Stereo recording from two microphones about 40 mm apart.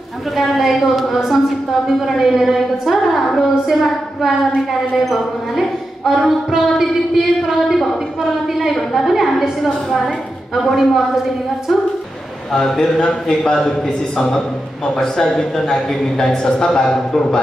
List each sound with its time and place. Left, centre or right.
0.4 s a woman's voice: centre
3.3 s a sound: centre
5.0 s a woman's voice: centre
10.5 s a man's voice: centre
12.5 s speech: centre